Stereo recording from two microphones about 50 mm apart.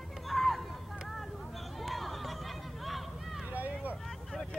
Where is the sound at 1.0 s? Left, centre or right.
Centre.